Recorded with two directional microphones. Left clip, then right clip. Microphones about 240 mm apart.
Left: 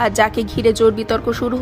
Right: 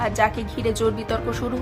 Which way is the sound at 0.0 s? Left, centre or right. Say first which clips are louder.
Left 6 dB; left.